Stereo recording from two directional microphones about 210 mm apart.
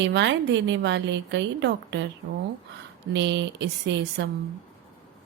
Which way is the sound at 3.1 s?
60° right (ahead or behind).